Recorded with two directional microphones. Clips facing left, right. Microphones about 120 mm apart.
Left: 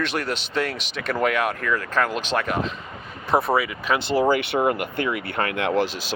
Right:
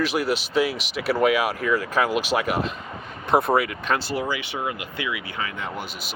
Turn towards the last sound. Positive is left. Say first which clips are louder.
# left 10 dB
turn(degrees=90)